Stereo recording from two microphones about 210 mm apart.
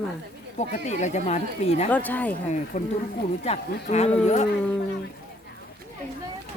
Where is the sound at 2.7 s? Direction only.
40° left (ahead or behind).